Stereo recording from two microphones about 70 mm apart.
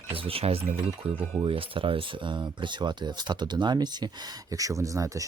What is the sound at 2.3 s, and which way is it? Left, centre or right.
Speech, right.